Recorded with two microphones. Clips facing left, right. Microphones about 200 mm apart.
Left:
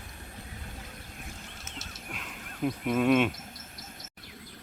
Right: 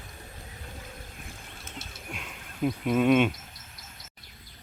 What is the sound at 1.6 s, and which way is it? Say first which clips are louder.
Wild animals: right 1 dB; 55° right (ahead or behind).